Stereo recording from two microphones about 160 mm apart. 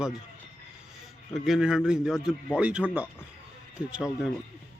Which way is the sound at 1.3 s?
Centre (ahead or behind).